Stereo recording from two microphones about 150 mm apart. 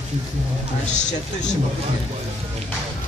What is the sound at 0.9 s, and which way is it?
Speech, 55° left (ahead or behind).